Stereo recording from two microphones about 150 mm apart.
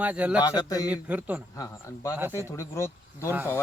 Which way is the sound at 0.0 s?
10° right (ahead or behind).